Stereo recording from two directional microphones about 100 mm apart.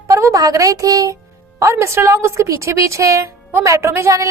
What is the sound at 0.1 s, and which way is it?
A woman's voice, 30° right (ahead or behind).